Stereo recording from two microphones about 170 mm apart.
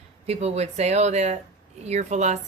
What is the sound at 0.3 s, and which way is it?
A woman's voice, 40° right (ahead or behind).